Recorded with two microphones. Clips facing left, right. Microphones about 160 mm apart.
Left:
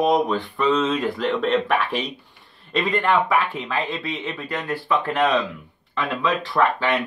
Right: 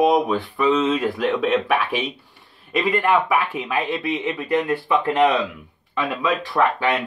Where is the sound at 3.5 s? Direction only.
15° right (ahead or behind).